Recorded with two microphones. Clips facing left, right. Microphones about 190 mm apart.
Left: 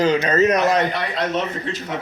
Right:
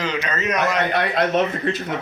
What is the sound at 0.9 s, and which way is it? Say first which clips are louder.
Speech: right 4 dB; 55° right (ahead or behind).